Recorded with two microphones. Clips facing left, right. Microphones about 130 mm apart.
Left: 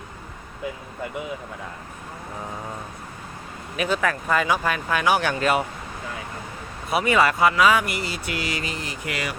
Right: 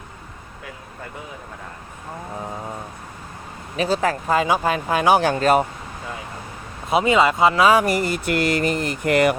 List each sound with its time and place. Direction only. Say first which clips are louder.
3.8 s speech: right 3 dB; 35° right (ahead or behind)
6.9 s speech: right 3 dB; 20° right (ahead or behind); by 9.4 s 55° right (ahead or behind)